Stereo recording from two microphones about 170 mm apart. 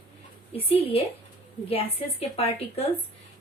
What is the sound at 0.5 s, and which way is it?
A woman's voice, 35° left (ahead or behind).